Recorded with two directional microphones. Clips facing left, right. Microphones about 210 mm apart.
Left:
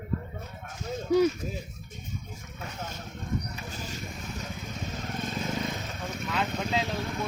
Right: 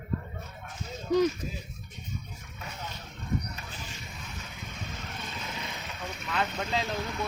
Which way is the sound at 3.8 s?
40° left (ahead or behind).